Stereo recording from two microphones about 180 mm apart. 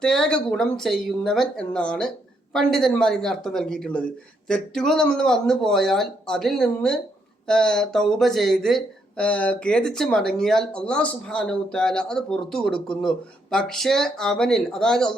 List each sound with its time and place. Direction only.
0.0 s speech: 5° left (ahead or behind)